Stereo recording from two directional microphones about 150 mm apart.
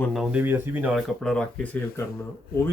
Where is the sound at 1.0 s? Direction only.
5° left (ahead or behind).